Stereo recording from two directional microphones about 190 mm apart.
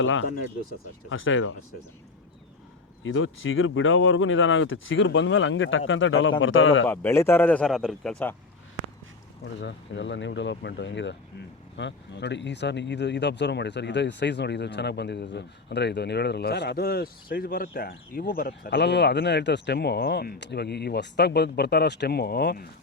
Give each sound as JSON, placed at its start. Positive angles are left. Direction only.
{"t": 0.0, "sound": "speech", "side_deg": 90}
{"t": 3.0, "sound": "speech", "side_deg": 90}
{"t": 6.8, "sound": "a man's voice", "side_deg": 10}
{"t": 9.4, "sound": "speech", "side_deg": 70}